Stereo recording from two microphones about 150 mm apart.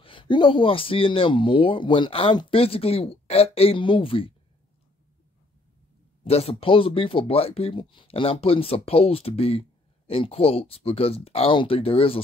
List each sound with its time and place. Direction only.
0.0 s speech: 35° left (ahead or behind)
6.2 s speech: 40° left (ahead or behind)